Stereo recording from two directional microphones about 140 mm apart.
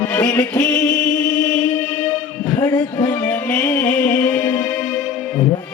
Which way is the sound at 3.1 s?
15° left (ahead or behind).